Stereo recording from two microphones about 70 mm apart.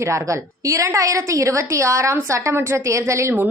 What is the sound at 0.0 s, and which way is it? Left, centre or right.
A woman's voice, right.